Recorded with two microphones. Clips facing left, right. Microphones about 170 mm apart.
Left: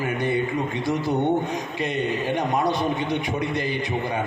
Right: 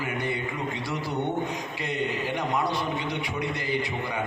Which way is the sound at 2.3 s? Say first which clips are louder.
Left 4 dB; 20° left (ahead or behind).